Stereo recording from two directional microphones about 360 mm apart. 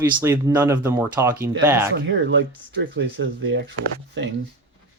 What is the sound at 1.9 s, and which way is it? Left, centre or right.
Speech, right.